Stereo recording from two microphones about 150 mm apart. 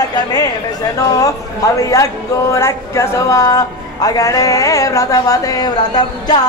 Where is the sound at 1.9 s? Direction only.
20° left (ahead or behind).